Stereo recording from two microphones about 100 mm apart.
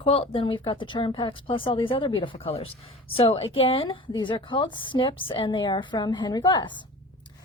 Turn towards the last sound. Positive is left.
turn(degrees=50)  # may be behind; listen again after turning